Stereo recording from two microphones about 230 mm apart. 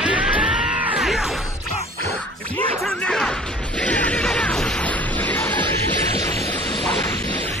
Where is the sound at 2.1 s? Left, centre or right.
Centre.